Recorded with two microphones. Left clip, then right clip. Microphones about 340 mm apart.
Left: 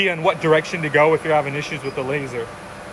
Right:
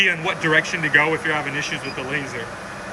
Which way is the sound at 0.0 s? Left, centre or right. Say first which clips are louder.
Left 1 dB; centre.